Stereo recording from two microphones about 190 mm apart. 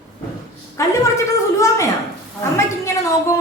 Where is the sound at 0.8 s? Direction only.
15° left (ahead or behind).